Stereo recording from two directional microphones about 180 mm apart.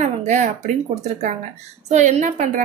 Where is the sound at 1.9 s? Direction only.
40° right (ahead or behind).